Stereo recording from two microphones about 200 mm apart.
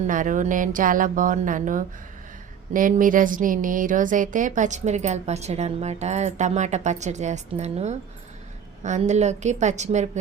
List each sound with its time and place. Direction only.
0.1 s speech: 40° right (ahead or behind)